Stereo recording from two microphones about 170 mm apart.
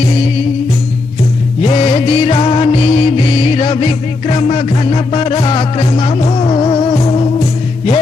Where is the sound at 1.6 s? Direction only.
35° left (ahead or behind).